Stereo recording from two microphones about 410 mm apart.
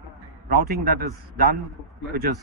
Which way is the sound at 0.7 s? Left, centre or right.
Right.